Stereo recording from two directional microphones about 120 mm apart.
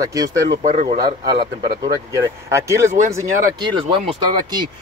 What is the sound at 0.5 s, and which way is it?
Speech, 75° right (ahead or behind).